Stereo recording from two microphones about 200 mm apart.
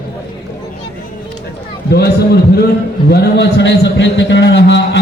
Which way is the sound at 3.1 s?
60° left (ahead or behind).